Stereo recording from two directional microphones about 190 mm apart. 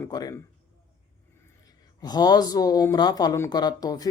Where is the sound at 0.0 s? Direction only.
20° left (ahead or behind).